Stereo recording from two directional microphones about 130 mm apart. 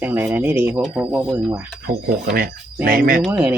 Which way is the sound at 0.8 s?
Centre (ahead or behind).